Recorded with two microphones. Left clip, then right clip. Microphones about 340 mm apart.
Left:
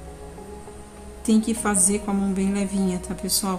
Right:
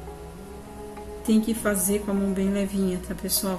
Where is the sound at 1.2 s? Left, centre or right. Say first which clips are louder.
Left 1 dB; centre.